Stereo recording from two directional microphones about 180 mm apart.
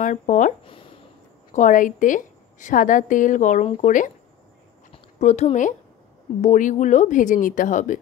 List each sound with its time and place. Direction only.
0.0 s speech: 45° left (ahead or behind)
1.5 s a woman's voice: 45° left (ahead or behind)
5.2 s a woman's voice: 40° left (ahead or behind)